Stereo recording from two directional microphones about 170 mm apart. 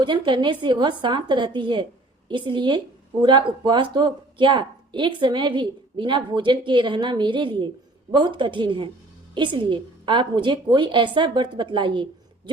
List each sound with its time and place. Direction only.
0.0 s speech: 30° right (ahead or behind)